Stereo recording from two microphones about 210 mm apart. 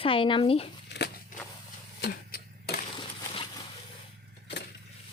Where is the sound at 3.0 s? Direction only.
25° left (ahead or behind).